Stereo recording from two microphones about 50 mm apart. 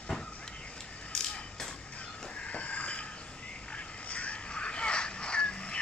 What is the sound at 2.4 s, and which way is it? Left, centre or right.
Crow, left.